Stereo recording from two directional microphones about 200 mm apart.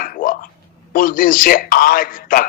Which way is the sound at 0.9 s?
45° left (ahead or behind).